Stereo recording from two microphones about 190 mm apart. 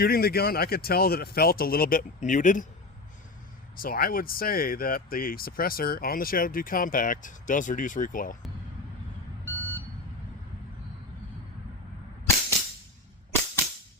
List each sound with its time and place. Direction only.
0.0 s speech: 55° left (ahead or behind)
3.8 s speech: 50° left (ahead or behind)
9.4 s vehicle: 10° left (ahead or behind)